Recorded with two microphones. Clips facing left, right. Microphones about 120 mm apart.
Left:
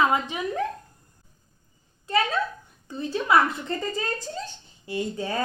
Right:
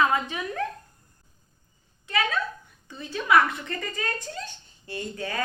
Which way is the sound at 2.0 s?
35° left (ahead or behind).